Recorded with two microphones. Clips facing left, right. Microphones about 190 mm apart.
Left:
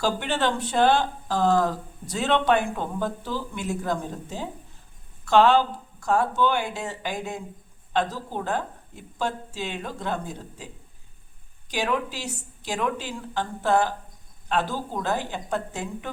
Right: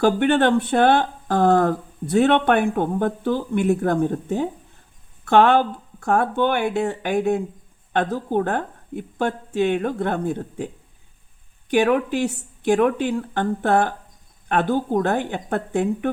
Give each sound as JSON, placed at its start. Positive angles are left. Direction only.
{"t": 0.0, "sound": "speech", "side_deg": -55}
{"t": 11.7, "sound": "speech", "side_deg": -60}